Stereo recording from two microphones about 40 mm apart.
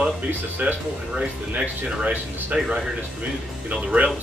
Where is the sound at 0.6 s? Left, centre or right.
Right.